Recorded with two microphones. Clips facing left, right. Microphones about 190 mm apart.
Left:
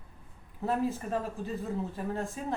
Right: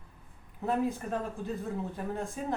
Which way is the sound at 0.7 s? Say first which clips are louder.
Even; centre (ahead or behind).